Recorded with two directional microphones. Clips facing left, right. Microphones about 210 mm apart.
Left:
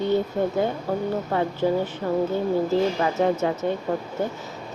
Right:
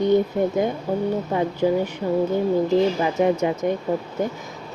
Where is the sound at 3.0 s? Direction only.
15° right (ahead or behind).